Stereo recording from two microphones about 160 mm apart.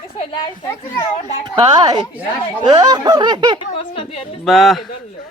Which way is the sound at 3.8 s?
35° left (ahead or behind).